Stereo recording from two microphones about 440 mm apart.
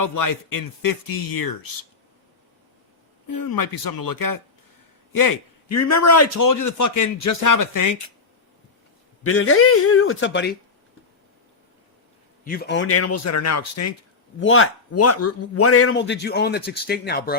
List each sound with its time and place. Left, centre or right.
0.0 s a man's voice: left
3.2 s a man's voice: left
9.2 s a man's voice: left
12.5 s a man's voice: left